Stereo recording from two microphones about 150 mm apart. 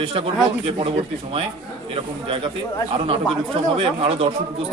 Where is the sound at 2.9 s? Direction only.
35° right (ahead or behind).